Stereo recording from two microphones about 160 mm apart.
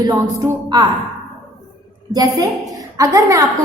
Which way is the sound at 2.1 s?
25° right (ahead or behind).